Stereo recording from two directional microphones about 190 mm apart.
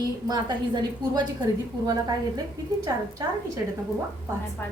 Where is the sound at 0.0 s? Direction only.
20° right (ahead or behind).